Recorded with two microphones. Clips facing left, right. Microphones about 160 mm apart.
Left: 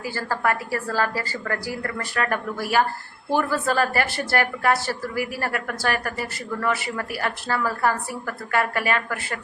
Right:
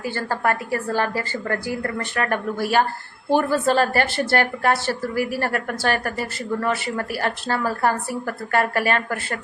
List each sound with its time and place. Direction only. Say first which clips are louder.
0.2 s a woman's voice: right 1 dB; 25° right (ahead or behind)